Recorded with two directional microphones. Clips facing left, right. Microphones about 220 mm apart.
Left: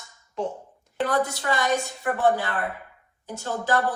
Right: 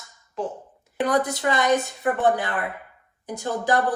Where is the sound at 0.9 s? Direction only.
15° right (ahead or behind).